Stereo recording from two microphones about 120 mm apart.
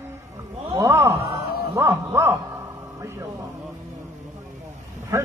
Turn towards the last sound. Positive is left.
turn(degrees=-25)  # may be behind; listen again after turning